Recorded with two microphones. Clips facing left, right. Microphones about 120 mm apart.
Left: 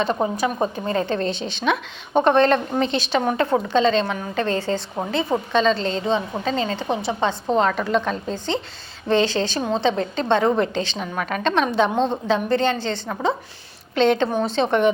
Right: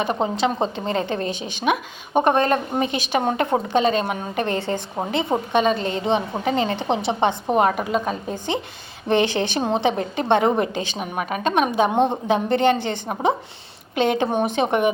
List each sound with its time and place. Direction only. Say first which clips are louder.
0.0 s a woman's voice: even; 20° right (ahead or behind)